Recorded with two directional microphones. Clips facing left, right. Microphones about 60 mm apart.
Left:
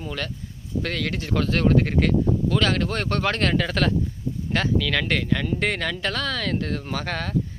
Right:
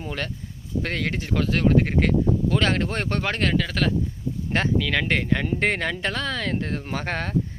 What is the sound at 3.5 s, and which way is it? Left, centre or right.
Speech, centre.